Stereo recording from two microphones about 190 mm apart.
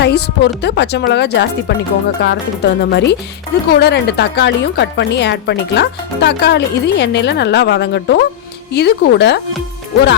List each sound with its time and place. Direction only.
0.0 s a woman's voice: 60° left (ahead or behind)